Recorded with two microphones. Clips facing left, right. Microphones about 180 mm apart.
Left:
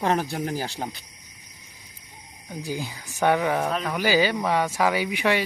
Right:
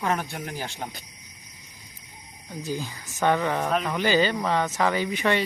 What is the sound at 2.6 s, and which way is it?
Speech, 15° left (ahead or behind).